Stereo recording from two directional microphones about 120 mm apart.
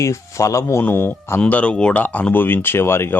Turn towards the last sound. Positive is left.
turn(degrees=20)  # may be behind; listen again after turning